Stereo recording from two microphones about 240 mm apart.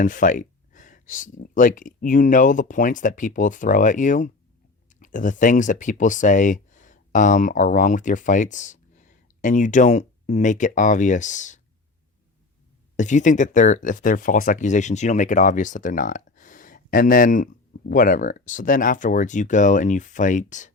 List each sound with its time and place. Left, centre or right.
0.0 s speech: left
13.0 s speech: left